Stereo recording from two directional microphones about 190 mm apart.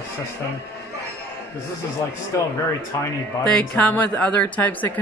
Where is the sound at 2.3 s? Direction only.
15° left (ahead or behind).